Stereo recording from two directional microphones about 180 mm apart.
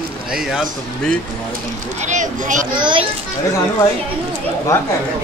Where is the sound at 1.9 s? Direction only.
40° right (ahead or behind).